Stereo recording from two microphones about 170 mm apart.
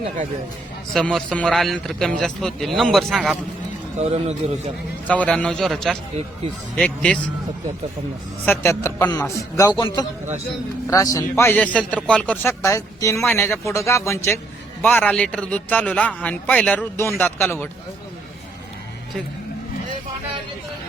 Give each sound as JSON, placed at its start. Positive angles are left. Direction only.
{"t": 0.9, "sound": "a man's voice", "side_deg": 5}
{"t": 5.0, "sound": "a man's voice", "side_deg": 10}
{"t": 8.4, "sound": "a man's voice", "side_deg": 15}